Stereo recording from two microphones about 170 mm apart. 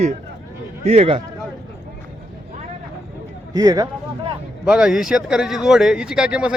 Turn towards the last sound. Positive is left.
turn(degrees=-5)  # may be behind; listen again after turning